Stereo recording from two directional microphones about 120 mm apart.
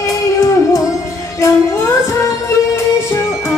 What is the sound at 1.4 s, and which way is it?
Music, 20° left (ahead or behind).